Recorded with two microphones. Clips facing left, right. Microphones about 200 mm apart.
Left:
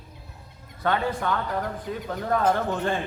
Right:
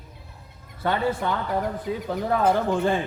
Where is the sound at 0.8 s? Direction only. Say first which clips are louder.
Right 1 dB; 15° right (ahead or behind).